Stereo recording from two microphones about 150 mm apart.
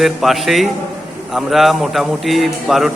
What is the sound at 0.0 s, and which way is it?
A man's voice, centre (ahead or behind).